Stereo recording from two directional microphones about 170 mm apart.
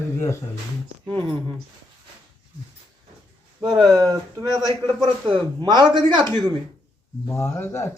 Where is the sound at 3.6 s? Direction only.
25° right (ahead or behind).